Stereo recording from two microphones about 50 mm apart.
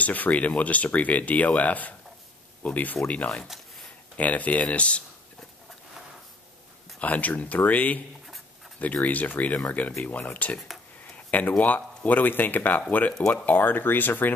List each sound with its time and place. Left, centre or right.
0.0 s speech: left
3.4 s a sound: centre
4.2 s speech: left
7.0 s speech: left
10.7 s a sound: centre
11.1 s speech: left